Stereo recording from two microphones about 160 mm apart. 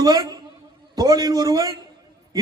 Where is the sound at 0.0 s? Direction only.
25° right (ahead or behind).